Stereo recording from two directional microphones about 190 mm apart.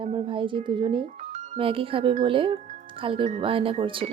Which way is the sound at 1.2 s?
40° right (ahead or behind).